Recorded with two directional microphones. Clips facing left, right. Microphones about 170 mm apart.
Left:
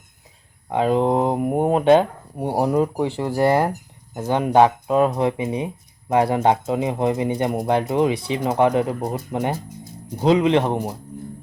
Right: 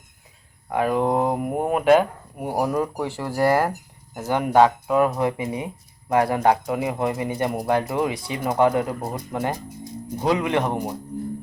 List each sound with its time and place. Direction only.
0.7 s speech: 20° left (ahead or behind)